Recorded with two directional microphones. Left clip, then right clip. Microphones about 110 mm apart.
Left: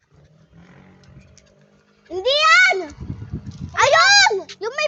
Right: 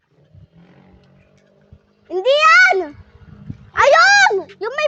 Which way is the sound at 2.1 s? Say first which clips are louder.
Right 3 dB; 75° right (ahead or behind).